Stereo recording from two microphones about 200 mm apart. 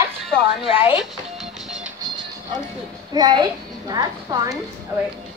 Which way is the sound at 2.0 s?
20° right (ahead or behind).